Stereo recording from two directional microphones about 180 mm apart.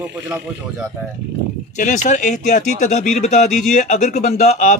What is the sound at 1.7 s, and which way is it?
Speech, 45° left (ahead or behind).